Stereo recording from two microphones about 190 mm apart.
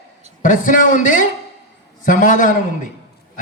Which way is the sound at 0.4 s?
45° left (ahead or behind).